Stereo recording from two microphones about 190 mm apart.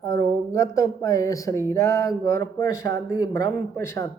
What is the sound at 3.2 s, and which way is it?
Speech, 20° left (ahead or behind).